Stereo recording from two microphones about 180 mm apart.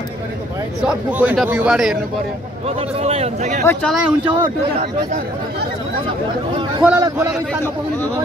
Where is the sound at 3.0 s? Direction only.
35° right (ahead or behind).